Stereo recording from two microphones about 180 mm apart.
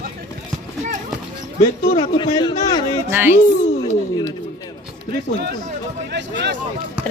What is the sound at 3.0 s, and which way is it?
Speech, 10° right (ahead or behind).